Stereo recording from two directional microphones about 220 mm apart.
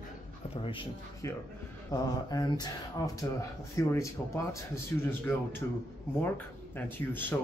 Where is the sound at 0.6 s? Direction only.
25° left (ahead or behind).